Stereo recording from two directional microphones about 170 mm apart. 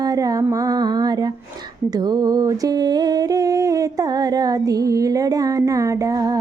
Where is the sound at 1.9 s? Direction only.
20° right (ahead or behind).